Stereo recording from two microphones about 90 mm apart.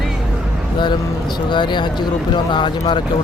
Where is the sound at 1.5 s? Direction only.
55° left (ahead or behind).